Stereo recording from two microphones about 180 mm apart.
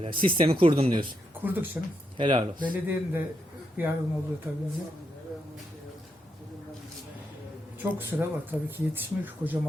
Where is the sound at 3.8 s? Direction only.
10° right (ahead or behind).